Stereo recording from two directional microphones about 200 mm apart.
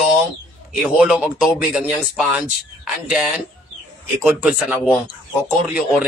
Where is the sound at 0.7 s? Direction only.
5° right (ahead or behind).